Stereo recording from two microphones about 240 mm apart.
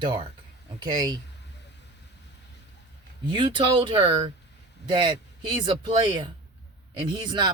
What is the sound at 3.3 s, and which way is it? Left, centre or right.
Speech, right.